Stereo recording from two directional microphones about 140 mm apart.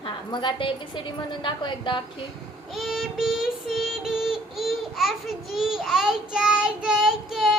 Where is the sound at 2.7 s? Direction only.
Centre (ahead or behind).